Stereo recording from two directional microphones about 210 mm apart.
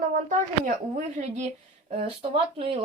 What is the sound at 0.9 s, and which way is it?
A woman's voice, 35° right (ahead or behind).